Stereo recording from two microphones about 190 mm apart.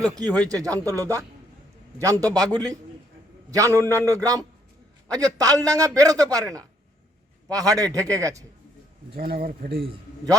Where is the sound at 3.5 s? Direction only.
15° right (ahead or behind).